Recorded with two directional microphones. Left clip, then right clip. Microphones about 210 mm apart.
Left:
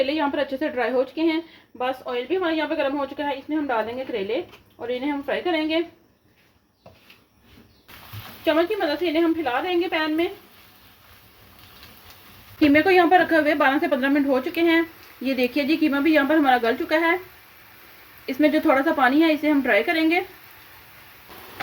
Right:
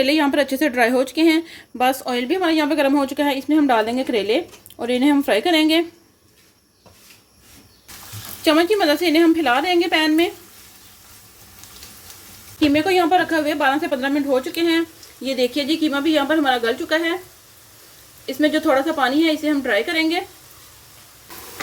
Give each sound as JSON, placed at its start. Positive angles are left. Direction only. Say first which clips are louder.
{"t": 0.0, "sound": "a woman's voice", "louder": "right 5 dB", "side_deg": -40}
{"t": 1.8, "sound": "a woman's voice", "louder": "right 7 dB", "side_deg": -60}
{"t": 8.4, "sound": "a woman's voice", "louder": "right 5 dB", "side_deg": -60}
{"t": 12.5, "sound": "a woman's voice", "louder": "even", "side_deg": 0}
{"t": 18.3, "sound": "a woman's voice", "louder": "right 1 dB", "side_deg": 5}